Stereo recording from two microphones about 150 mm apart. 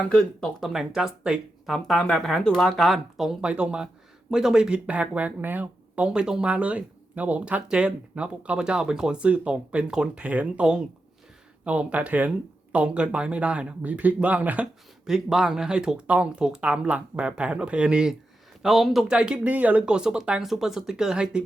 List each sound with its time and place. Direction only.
0.1 s speech: 5° left (ahead or behind)